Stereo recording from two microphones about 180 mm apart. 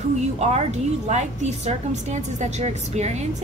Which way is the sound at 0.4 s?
35° right (ahead or behind).